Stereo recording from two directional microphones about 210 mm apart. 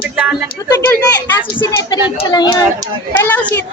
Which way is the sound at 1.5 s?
15° left (ahead or behind).